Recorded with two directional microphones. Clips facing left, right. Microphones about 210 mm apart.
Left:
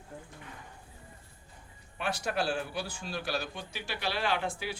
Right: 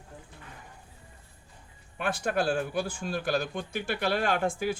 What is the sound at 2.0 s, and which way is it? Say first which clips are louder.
A man's voice: right 4 dB; 50° right (ahead or behind).